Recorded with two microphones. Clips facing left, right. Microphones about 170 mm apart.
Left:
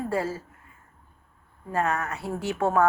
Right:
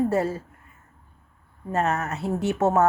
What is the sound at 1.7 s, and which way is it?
Speech, 25° right (ahead or behind).